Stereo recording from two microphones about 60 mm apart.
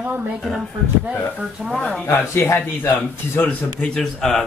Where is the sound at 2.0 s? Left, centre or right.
Left.